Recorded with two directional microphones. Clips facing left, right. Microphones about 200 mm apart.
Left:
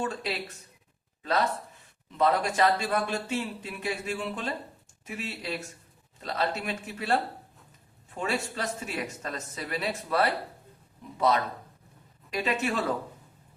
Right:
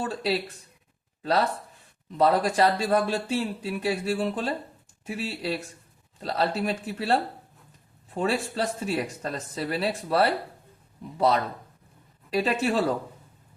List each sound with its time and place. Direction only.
0.0 s speech: 35° right (ahead or behind)
12.3 s speech: 35° right (ahead or behind)